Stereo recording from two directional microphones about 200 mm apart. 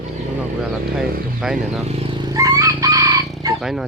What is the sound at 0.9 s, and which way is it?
Speech, 5° right (ahead or behind).